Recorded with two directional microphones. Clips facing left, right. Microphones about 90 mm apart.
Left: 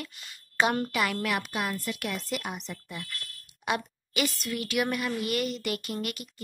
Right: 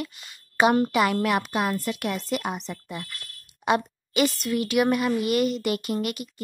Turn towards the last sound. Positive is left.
turn(degrees=-20)  # may be behind; listen again after turning